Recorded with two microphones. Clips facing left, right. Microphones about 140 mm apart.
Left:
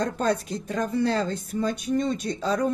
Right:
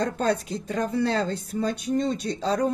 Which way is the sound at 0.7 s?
35° right (ahead or behind).